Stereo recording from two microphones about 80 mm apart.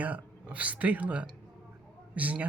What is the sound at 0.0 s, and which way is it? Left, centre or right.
Speech, centre.